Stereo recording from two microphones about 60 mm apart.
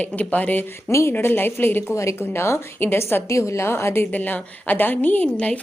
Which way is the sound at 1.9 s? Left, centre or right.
Left.